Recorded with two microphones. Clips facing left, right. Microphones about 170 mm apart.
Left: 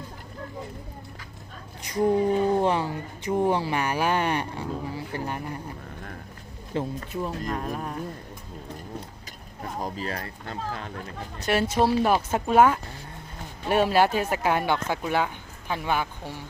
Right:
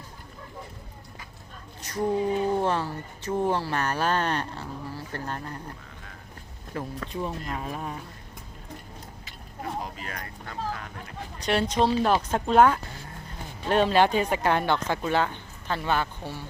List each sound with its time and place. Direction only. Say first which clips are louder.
1.8 s a woman's voice: left 4 dB; 15° left (ahead or behind)
6.7 s speech: left 5 dB; 25° left (ahead or behind)
7.1 s speech: left 2 dB; centre (ahead or behind)
9.8 s speech: left 6 dB; 30° left (ahead or behind)
11.3 s a woman's voice: left 1 dB; 5° left (ahead or behind)